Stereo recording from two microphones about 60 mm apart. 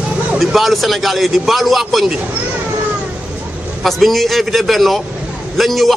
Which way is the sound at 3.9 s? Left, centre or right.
Centre.